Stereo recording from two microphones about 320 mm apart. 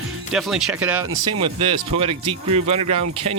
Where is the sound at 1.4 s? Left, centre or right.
Centre.